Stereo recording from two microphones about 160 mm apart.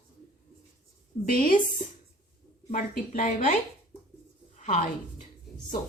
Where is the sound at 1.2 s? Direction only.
60° left (ahead or behind).